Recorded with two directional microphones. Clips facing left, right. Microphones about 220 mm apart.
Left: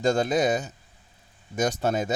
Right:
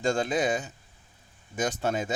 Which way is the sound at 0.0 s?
40° left (ahead or behind).